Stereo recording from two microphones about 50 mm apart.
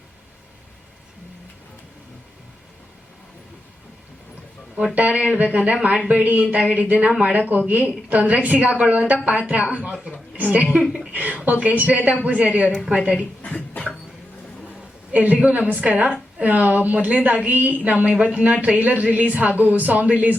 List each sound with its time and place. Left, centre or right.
4.9 s a woman's voice: right
13.1 s a sound: left
15.1 s a woman's voice: right